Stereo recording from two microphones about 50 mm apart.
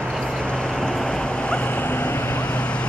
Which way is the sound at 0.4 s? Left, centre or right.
Centre.